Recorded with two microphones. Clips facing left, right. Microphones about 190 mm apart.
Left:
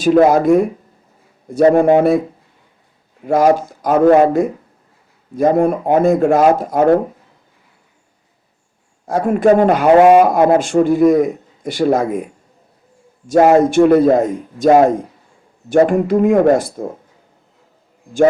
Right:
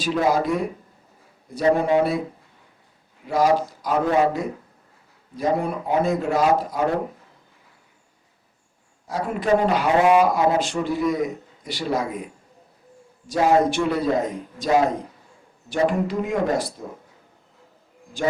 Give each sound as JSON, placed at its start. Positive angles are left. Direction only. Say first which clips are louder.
{"t": 0.0, "sound": "speech", "louder": "left 10 dB", "side_deg": 50}
{"t": 3.2, "sound": "speech", "louder": "left 7 dB", "side_deg": 50}
{"t": 9.0, "sound": "speech", "louder": "left 9 dB", "side_deg": 50}
{"t": 13.2, "sound": "speech", "louder": "left 8 dB", "side_deg": 55}